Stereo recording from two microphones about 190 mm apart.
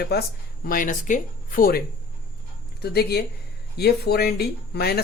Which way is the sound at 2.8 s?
60° left (ahead or behind).